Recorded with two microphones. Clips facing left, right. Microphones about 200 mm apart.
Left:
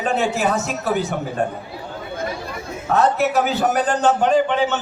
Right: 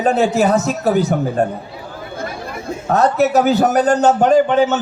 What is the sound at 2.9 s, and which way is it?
A man's voice, 40° right (ahead or behind).